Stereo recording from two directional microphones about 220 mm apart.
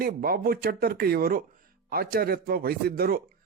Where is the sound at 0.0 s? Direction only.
45° right (ahead or behind).